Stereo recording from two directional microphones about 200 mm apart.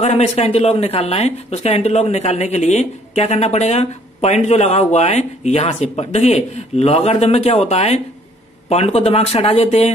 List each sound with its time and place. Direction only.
0.0 s speech: 35° left (ahead or behind)